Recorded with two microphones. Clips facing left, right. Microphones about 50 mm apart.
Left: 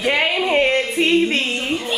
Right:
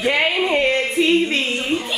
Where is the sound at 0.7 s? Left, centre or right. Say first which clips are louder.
Even; left.